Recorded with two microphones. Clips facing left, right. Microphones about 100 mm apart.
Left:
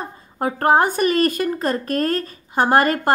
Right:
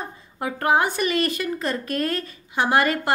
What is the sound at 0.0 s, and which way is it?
A woman's voice, 40° left (ahead or behind).